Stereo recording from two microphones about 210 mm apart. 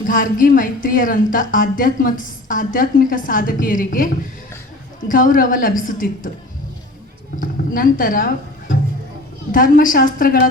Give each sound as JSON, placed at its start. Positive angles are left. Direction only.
{"t": 0.1, "sound": "a woman's voice", "side_deg": 40}
{"t": 7.7, "sound": "a woman's voice", "side_deg": 40}
{"t": 9.5, "sound": "a woman's voice", "side_deg": 40}